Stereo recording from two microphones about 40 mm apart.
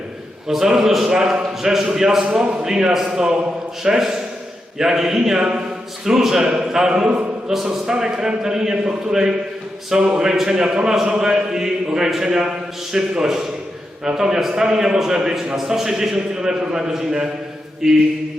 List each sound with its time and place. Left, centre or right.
0.4 s a man's voice: centre